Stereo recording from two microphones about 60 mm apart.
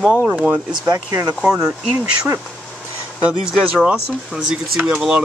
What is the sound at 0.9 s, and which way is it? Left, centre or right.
Speech, right.